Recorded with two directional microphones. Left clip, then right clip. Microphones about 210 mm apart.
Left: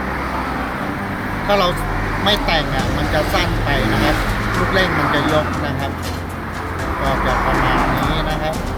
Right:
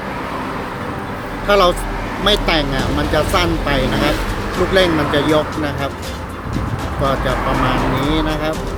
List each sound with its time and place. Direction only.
1.5 s speech: 45° right (ahead or behind)
8.1 s speech: 45° right (ahead or behind)